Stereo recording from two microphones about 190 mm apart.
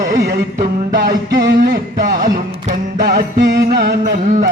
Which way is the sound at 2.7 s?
60° right (ahead or behind).